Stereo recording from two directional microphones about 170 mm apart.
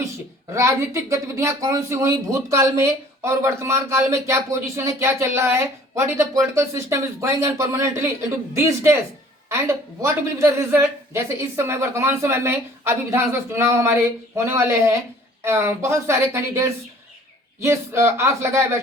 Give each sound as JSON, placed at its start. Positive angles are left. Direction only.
{"t": 1.1, "sound": "speech", "side_deg": -15}